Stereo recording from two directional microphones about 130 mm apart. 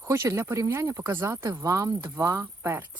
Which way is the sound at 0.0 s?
20° right (ahead or behind).